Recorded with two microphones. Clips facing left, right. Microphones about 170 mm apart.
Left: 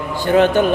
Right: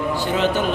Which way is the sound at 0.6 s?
60° left (ahead or behind).